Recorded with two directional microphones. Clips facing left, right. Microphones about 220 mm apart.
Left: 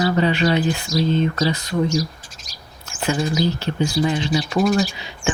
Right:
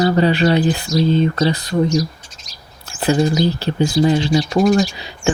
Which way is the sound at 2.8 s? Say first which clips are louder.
Right 6 dB; 35° right (ahead or behind).